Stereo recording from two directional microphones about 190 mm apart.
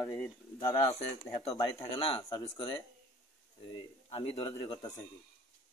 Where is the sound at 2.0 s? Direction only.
30° left (ahead or behind).